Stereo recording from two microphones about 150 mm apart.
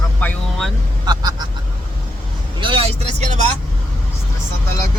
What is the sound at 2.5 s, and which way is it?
Speech, 35° right (ahead or behind).